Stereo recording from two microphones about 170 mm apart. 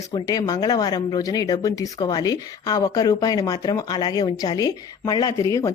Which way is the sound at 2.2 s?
20° left (ahead or behind).